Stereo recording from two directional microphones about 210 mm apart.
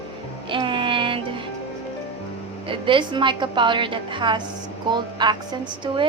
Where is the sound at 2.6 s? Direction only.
25° right (ahead or behind).